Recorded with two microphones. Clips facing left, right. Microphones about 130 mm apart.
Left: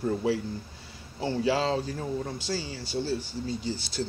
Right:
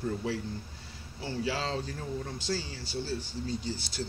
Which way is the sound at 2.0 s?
25° left (ahead or behind).